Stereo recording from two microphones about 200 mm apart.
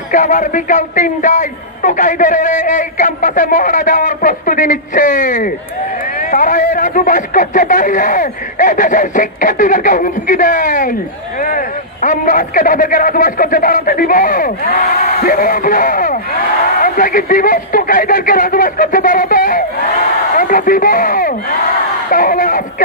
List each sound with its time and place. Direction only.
0.1 s speech: 40° left (ahead or behind)